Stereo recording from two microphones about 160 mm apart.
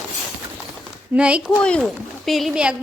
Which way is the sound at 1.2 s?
5° right (ahead or behind).